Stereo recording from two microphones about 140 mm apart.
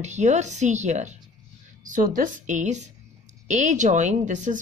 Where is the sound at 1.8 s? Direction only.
65° right (ahead or behind).